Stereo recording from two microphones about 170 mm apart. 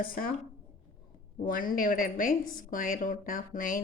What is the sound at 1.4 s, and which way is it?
A woman's voice, 55° left (ahead or behind).